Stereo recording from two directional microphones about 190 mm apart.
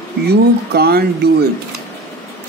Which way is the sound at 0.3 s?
55° right (ahead or behind).